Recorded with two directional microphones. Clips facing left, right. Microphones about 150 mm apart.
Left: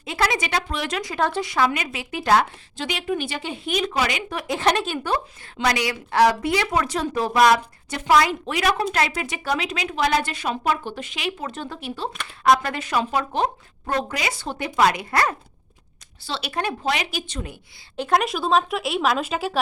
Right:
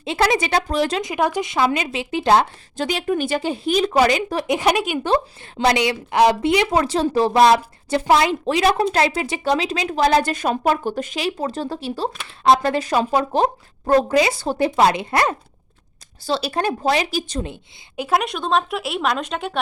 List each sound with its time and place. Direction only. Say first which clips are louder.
0.0 s a woman's voice: right 5 dB; 25° right (ahead or behind)
1.0 s speech: right 3 dB; 15° right (ahead or behind)
2.7 s a woman's voice: right 5 dB; 45° right (ahead or behind)
4.4 s speech: right 1 dB; 15° right (ahead or behind)
5.0 s a woman's voice: right 6 dB; 30° right (ahead or behind)
16.2 s a woman's voice: right 6 dB; 35° right (ahead or behind)
17.9 s speech: even; 5° right (ahead or behind)